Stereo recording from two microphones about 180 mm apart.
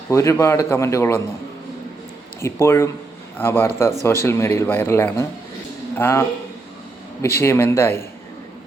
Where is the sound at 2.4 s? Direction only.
15° left (ahead or behind).